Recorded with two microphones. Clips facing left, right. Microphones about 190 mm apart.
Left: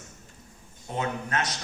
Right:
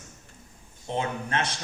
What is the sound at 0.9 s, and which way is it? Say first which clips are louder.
Speech: right 1 dB; 30° right (ahead or behind).